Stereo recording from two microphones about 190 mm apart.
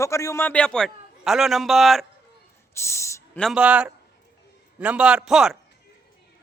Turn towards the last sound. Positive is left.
turn(degrees=-5)  # may be behind; listen again after turning